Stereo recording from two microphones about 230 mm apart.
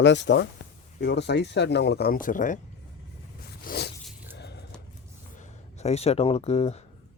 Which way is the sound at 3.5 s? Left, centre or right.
Left.